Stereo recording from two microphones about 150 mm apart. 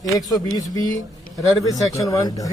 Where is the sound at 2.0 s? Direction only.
25° left (ahead or behind).